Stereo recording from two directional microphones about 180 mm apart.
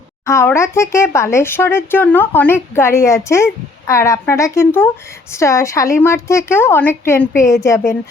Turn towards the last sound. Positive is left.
turn(degrees=15)  # may be behind; listen again after turning